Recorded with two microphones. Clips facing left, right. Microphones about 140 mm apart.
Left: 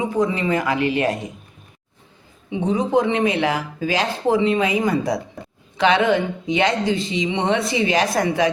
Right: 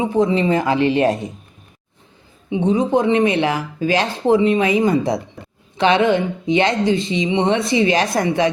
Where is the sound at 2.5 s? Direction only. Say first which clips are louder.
Right 4 dB; 20° right (ahead or behind).